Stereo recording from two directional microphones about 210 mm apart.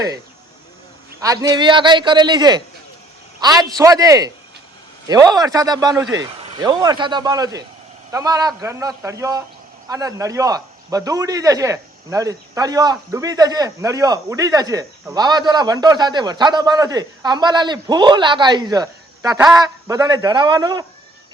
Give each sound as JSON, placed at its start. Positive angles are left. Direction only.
{"t": 1.2, "sound": "a man's voice", "side_deg": -15}